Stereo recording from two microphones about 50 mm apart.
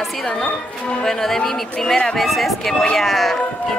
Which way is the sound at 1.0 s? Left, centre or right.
Centre.